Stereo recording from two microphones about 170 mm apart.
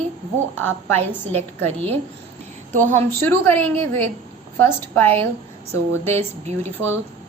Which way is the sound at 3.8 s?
30° right (ahead or behind).